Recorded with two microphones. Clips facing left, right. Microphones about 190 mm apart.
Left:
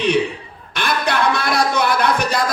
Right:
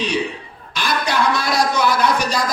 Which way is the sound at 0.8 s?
55° left (ahead or behind).